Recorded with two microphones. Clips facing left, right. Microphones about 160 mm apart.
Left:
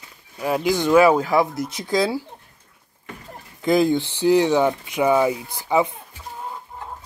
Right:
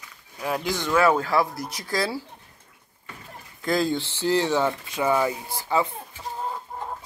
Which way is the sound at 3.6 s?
20° left (ahead or behind).